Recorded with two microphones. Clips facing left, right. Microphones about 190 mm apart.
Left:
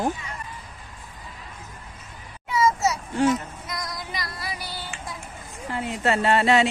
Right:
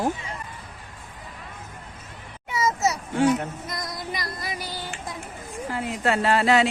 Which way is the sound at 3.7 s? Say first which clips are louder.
Even; 20° right (ahead or behind).